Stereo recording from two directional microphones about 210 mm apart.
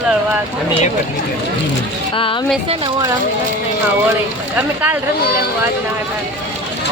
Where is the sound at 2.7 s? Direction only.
20° right (ahead or behind).